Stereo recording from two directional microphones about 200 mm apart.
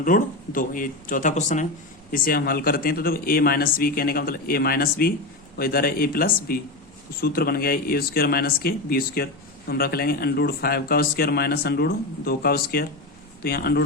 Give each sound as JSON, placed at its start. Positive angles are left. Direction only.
{"t": 0.0, "sound": "speech", "side_deg": 45}